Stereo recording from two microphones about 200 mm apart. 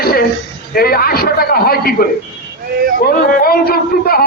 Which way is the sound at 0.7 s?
50° left (ahead or behind).